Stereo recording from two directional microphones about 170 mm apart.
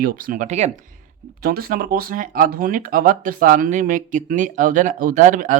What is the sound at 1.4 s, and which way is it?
Speech, 60° right (ahead or behind).